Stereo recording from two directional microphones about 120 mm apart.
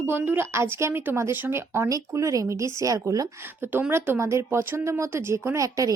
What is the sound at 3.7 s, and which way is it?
A woman's voice, 15° right (ahead or behind).